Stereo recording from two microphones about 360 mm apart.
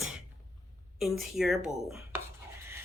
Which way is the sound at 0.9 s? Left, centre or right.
Centre.